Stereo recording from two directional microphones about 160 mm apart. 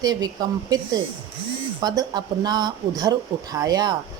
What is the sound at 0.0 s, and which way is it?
Speech, 25° right (ahead or behind).